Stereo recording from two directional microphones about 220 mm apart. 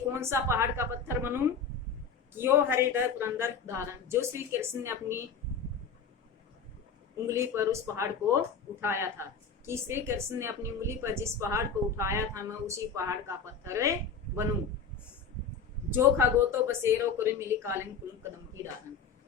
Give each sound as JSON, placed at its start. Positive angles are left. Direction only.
{"t": 0.1, "sound": "a woman's voice", "side_deg": -10}
{"t": 7.3, "sound": "a woman's voice", "side_deg": -10}
{"t": 15.9, "sound": "a woman's voice", "side_deg": -10}